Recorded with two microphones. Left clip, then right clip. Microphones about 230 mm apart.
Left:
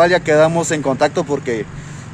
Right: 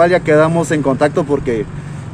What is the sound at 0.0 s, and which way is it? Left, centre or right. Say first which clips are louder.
Speech: right 1 dB; centre.